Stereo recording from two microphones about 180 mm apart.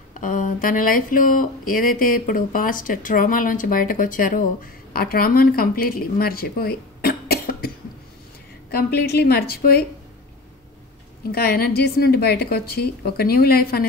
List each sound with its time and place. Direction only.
0.2 s speech: 45° left (ahead or behind)
8.7 s a woman's voice: 65° left (ahead or behind)
11.3 s a woman's voice: 60° left (ahead or behind)